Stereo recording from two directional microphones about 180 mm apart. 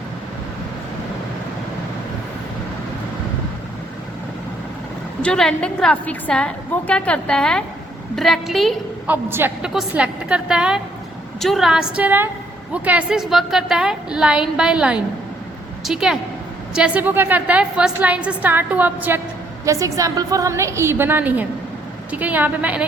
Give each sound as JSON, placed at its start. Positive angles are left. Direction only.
{"t": 5.2, "sound": "a woman's voice", "side_deg": 5}
{"t": 9.0, "sound": "a woman's voice", "side_deg": -10}